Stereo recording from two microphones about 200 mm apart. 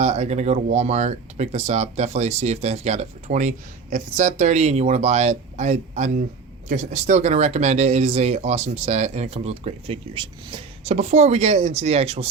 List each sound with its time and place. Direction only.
0.0 s speech: 35° right (ahead or behind)